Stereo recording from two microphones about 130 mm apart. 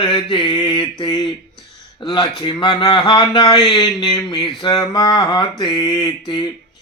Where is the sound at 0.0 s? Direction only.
35° left (ahead or behind).